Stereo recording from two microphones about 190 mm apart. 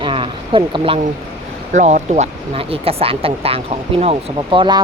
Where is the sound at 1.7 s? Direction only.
40° right (ahead or behind).